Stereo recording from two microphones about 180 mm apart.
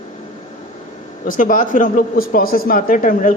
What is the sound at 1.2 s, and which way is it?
A man's voice, 45° left (ahead or behind).